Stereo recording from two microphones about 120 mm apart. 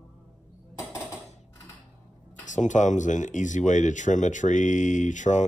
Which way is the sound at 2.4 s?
90° left.